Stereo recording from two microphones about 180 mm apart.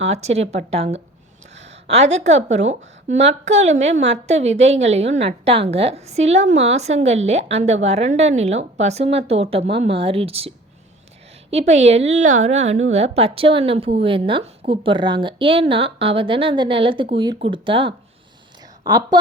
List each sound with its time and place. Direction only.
0.0 s a woman's voice: 35° right (ahead or behind)
11.5 s a woman's voice: 40° right (ahead or behind); by 19.2 s 20° right (ahead or behind)